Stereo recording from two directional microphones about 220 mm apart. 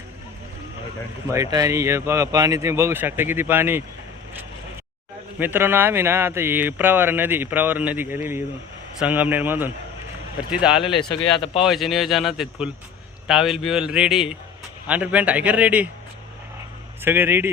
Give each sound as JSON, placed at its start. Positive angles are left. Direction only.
{"t": 1.3, "sound": "speech", "side_deg": -15}
{"t": 5.4, "sound": "speech", "side_deg": -10}
{"t": 10.9, "sound": "a man's voice", "side_deg": 25}
{"t": 11.5, "sound": "speech", "side_deg": 0}
{"t": 17.0, "sound": "speech", "side_deg": -10}